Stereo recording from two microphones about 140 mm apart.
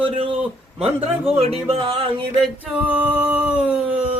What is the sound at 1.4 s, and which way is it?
Speech, 45° right (ahead or behind).